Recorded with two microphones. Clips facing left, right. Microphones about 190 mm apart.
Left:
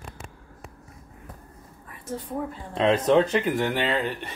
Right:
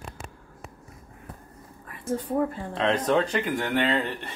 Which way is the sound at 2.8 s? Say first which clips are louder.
Left 4 dB; 10° left (ahead or behind).